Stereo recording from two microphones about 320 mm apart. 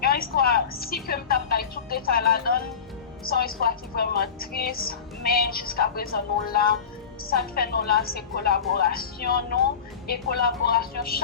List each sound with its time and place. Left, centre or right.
0.0 s music: left
3.2 s a woman's voice: left